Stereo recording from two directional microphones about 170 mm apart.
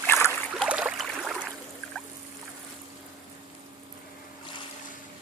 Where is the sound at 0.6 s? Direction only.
5° right (ahead or behind).